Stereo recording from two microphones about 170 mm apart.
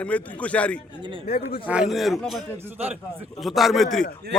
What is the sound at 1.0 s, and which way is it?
Speech, 30° right (ahead or behind).